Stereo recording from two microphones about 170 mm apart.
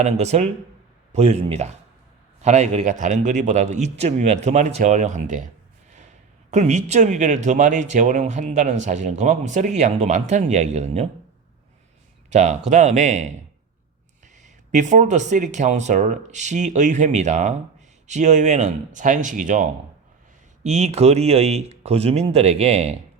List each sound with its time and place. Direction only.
0.0 s speech: 40° right (ahead or behind)
6.5 s speech: 45° right (ahead or behind)
12.3 s speech: 40° right (ahead or behind)
14.4 s speech: 45° right (ahead or behind)
20.7 s speech: 40° right (ahead or behind)